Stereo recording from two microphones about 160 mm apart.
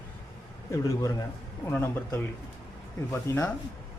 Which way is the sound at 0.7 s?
20° left (ahead or behind).